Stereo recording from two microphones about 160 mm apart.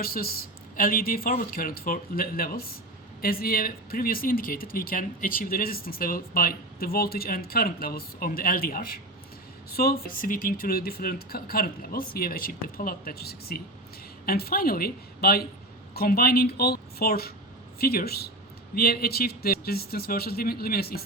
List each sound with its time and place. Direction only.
0.0 s speech: 65° left (ahead or behind)